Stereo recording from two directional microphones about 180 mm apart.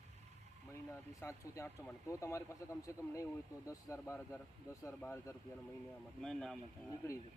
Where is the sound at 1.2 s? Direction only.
15° left (ahead or behind).